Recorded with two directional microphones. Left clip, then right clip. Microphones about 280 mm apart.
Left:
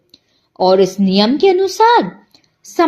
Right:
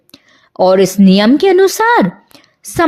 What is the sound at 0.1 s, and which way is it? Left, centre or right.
Speech, right.